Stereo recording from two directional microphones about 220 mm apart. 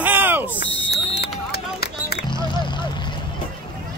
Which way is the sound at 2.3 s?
20° left (ahead or behind).